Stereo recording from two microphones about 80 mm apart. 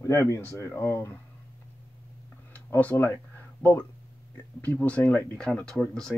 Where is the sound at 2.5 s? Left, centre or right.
Left.